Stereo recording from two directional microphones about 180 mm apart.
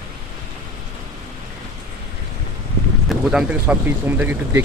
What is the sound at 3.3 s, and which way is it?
Speech, 5° right (ahead or behind).